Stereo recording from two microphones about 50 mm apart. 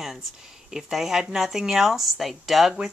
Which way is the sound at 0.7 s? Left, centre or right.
Centre.